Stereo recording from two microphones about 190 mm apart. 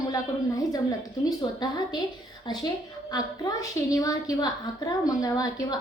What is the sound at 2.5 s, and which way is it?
A woman's voice, 20° left (ahead or behind).